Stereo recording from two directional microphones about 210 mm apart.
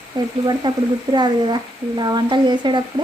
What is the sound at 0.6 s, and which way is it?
A woman's voice, 20° right (ahead or behind).